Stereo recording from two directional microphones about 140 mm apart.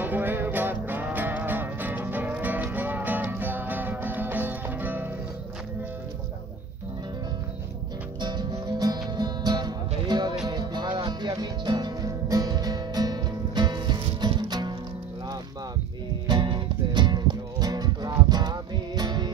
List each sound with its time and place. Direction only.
0.0 s music: 15° right (ahead or behind)
8.2 s music: 30° right (ahead or behind)
16.3 s music: 35° right (ahead or behind)